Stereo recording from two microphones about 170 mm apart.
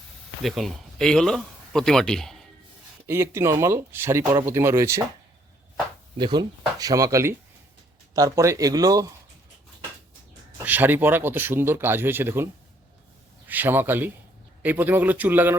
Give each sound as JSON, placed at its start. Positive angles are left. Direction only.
{"t": 0.4, "sound": "a man's voice", "side_deg": 0}
{"t": 3.1, "sound": "speech", "side_deg": -15}
{"t": 6.1, "sound": "speech", "side_deg": -25}
{"t": 10.7, "sound": "speech", "side_deg": -10}
{"t": 13.5, "sound": "speech", "side_deg": -10}